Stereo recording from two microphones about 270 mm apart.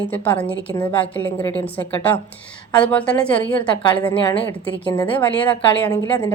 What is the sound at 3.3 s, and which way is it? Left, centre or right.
A woman's voice, centre.